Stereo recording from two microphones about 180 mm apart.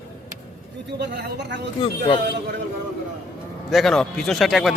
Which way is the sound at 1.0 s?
75° right (ahead or behind).